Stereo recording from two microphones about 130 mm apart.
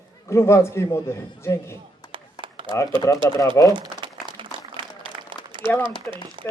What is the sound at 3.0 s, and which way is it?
Speech, 25° left (ahead or behind).